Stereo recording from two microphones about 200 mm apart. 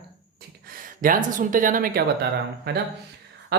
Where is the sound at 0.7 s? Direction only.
45° right (ahead or behind).